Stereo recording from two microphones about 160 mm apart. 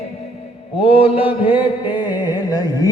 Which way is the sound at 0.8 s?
35° left (ahead or behind).